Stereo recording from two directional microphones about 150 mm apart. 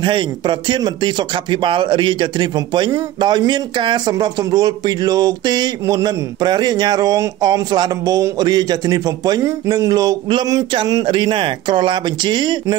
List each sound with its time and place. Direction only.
0.0 s a man's voice: 30° right (ahead or behind)